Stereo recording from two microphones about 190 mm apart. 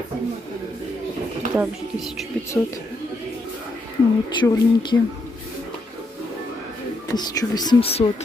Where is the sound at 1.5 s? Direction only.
Centre (ahead or behind).